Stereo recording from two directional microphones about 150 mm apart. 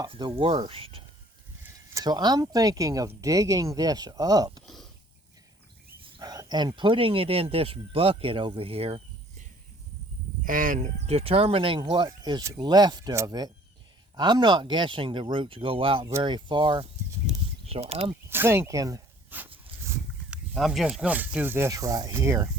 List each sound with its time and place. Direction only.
0.0 s speech: 30° right (ahead or behind)
1.6 s speech: 20° right (ahead or behind)
4.6 s a sound: centre (ahead or behind)
6.1 s speech: 25° right (ahead or behind)
10.4 s speech: 65° right (ahead or behind)
11.0 s speech: 40° right (ahead or behind)
17.7 s speech: 45° right (ahead or behind)
18.1 s speech: 15° right (ahead or behind)
19.3 s dog: 10° right (ahead or behind)
20.3 s speech: 5° right (ahead or behind)